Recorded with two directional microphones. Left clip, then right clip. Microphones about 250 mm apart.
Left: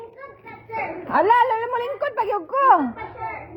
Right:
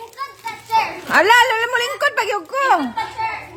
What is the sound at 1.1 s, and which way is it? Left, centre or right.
Speech, right.